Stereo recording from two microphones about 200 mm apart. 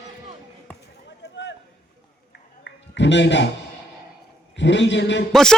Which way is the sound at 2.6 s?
60° left (ahead or behind).